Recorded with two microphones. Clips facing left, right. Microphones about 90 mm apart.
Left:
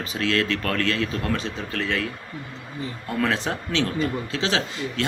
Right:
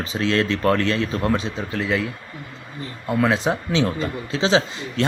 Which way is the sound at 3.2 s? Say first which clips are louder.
Right 4 dB; 15° right (ahead or behind).